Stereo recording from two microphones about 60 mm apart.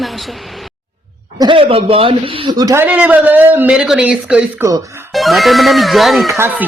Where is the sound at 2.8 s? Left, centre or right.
Right.